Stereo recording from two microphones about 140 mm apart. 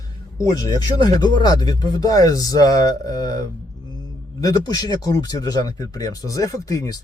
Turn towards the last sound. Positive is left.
turn(degrees=25)  # may be behind; listen again after turning